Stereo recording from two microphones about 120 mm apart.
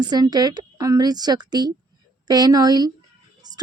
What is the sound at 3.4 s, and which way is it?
Music, 35° right (ahead or behind).